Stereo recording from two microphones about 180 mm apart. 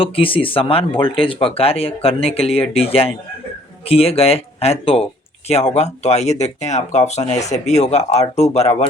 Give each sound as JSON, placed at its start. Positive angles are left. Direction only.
{"t": 0.0, "sound": "speech", "side_deg": 30}